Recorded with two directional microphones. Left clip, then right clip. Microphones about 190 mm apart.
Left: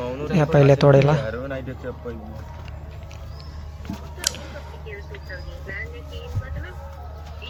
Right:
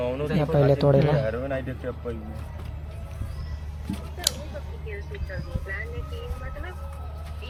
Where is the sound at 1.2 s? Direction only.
45° left (ahead or behind).